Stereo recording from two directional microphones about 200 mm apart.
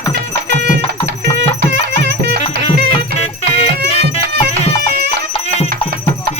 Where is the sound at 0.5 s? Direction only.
60° right (ahead or behind).